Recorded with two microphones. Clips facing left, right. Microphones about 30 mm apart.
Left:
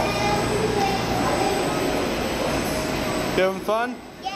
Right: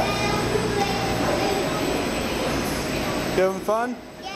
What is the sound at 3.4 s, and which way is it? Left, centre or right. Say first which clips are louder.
Speech: even; left.